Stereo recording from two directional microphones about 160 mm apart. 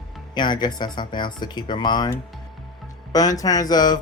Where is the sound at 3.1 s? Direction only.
20° left (ahead or behind).